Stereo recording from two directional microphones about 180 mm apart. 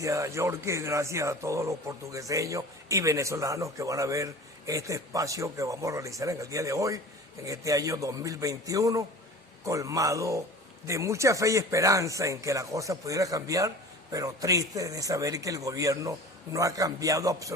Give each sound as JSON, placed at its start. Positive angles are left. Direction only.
{"t": 0.0, "sound": "a man's voice", "side_deg": -15}